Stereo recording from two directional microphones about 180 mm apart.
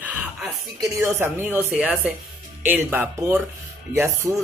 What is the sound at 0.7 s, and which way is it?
Speech, 15° right (ahead or behind).